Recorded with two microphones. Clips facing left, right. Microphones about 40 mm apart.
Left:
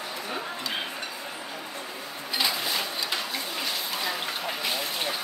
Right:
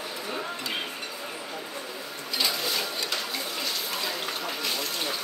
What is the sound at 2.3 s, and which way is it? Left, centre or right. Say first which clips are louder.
Sewing machine: left 1 dB; left.